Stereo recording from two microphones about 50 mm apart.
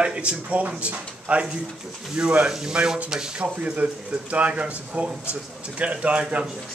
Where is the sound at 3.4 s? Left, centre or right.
Right.